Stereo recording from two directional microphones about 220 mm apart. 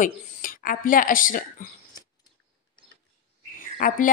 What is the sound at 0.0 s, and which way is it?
Speech, 40° left (ahead or behind).